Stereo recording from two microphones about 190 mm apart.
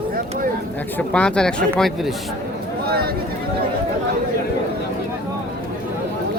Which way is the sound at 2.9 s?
55° right (ahead or behind).